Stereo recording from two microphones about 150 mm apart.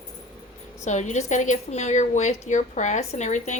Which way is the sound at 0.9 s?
50° left (ahead or behind).